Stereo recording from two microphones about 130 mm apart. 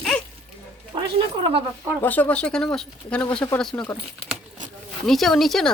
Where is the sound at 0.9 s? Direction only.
35° right (ahead or behind).